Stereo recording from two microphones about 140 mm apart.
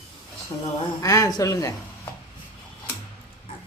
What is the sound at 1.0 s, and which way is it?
Speech, 25° left (ahead or behind).